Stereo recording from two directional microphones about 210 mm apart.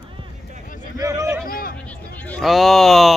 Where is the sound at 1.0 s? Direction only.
15° right (ahead or behind).